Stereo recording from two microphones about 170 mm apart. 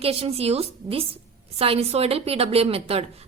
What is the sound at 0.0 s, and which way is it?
A woman's voice, 35° right (ahead or behind).